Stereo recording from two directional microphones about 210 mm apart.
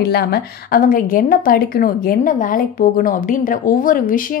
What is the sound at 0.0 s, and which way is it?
A woman's voice, 50° left (ahead or behind).